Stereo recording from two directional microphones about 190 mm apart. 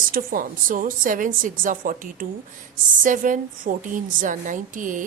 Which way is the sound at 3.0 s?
45° right (ahead or behind).